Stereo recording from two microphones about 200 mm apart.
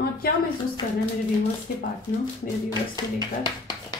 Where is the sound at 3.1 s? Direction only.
20° left (ahead or behind).